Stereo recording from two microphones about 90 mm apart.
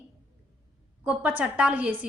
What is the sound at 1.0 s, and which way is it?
Speech, 15° right (ahead or behind).